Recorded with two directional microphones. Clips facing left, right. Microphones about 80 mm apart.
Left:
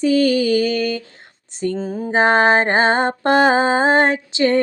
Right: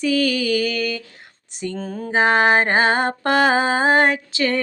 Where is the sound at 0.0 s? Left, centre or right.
Left.